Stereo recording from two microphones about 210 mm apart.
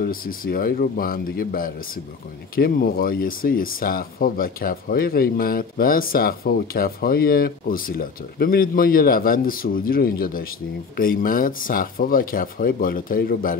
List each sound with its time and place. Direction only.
0.0 s speech: 45° left (ahead or behind)